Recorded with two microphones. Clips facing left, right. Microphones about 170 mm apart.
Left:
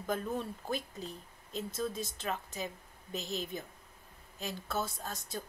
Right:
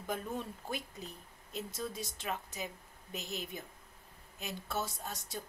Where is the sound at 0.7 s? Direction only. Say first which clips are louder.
Left 3 dB; 35° left (ahead or behind).